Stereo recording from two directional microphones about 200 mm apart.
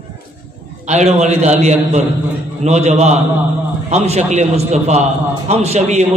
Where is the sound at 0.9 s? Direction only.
35° right (ahead or behind).